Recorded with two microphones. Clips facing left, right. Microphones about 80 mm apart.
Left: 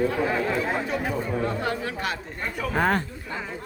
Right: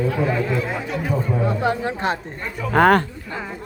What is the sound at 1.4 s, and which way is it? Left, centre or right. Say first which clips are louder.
Speech: right 6 dB; right.